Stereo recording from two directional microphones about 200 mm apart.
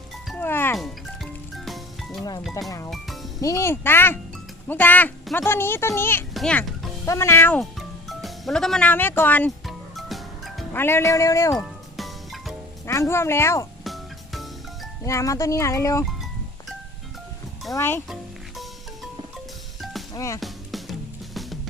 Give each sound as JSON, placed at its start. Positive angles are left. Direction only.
{"t": 0.3, "sound": "music", "side_deg": 10}
{"t": 0.8, "sound": "music", "side_deg": 0}
{"t": 2.4, "sound": "speech", "side_deg": 0}
{"t": 2.6, "sound": "speech", "side_deg": 15}
{"t": 6.3, "sound": "music", "side_deg": 5}
{"t": 10.7, "sound": "speech", "side_deg": 10}
{"t": 11.5, "sound": "music", "side_deg": 0}
{"t": 12.8, "sound": "speech", "side_deg": 15}
{"t": 13.8, "sound": "music", "side_deg": 0}
{"t": 15.0, "sound": "speech", "side_deg": 15}
{"t": 17.7, "sound": "speech", "side_deg": 10}
{"t": 20.1, "sound": "speech", "side_deg": 15}
{"t": 20.4, "sound": "music", "side_deg": 0}